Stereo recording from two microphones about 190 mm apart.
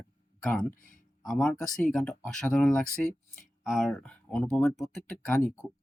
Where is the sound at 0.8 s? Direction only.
45° left (ahead or behind).